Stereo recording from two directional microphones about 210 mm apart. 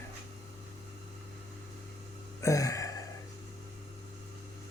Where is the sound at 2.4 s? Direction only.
15° left (ahead or behind).